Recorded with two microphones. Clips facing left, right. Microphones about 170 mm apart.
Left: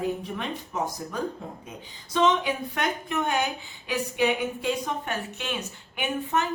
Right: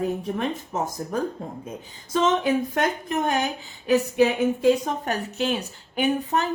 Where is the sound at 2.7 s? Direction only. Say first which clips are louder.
Right 4 dB; 40° right (ahead or behind).